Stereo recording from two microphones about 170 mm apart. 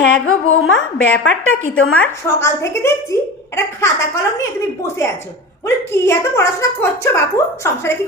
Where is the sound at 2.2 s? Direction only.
15° left (ahead or behind).